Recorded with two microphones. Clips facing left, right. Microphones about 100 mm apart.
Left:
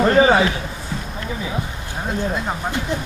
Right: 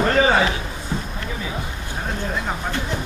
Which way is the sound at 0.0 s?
25° left (ahead or behind).